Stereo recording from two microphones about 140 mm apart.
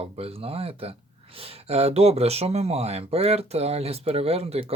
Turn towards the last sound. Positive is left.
turn(degrees=-45)  # may be behind; listen again after turning